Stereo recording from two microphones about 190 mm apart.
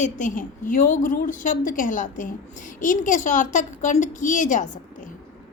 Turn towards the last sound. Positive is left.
turn(degrees=40)  # may be behind; listen again after turning